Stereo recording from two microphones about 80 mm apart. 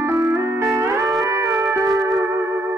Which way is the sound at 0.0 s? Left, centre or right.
Right.